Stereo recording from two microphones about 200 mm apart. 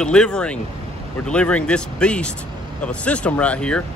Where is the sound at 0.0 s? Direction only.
5° left (ahead or behind).